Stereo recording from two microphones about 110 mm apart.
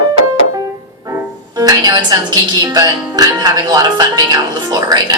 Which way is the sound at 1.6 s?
35° right (ahead or behind).